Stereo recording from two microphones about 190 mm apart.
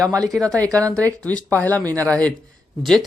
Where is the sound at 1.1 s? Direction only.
5° left (ahead or behind).